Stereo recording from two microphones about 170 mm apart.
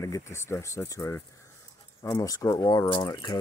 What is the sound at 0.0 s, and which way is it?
Speech, 15° left (ahead or behind).